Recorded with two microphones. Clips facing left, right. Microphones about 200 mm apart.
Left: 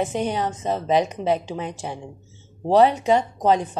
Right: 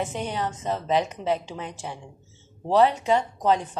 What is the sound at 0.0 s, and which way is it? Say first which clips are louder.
A woman's voice: left 5 dB; 15° left (ahead or behind).